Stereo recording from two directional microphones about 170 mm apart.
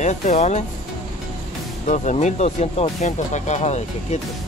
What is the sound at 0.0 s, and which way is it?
Speech, 40° left (ahead or behind).